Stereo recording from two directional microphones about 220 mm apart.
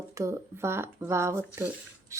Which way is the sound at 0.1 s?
15° right (ahead or behind).